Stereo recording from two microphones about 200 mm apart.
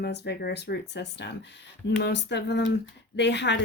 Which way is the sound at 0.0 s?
55° left (ahead or behind).